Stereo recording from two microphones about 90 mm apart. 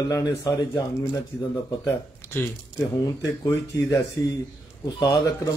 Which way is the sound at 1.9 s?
25° left (ahead or behind).